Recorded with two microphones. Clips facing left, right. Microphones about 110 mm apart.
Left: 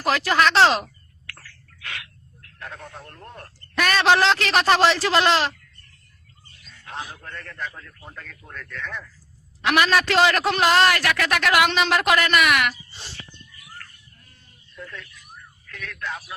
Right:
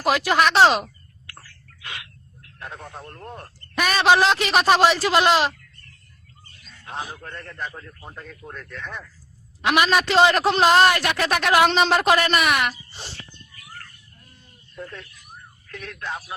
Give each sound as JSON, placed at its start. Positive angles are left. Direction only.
{"t": 0.0, "sound": "a man's voice", "side_deg": -15}
{"t": 1.3, "sound": "a sound", "side_deg": -20}
{"t": 2.4, "sound": "speech", "side_deg": -20}
{"t": 3.8, "sound": "a man's voice", "side_deg": -15}
{"t": 6.8, "sound": "a man's voice", "side_deg": -25}
{"t": 14.8, "sound": "speech", "side_deg": -35}